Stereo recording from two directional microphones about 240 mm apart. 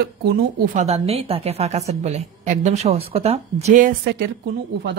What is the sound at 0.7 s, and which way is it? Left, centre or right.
A woman's voice, right.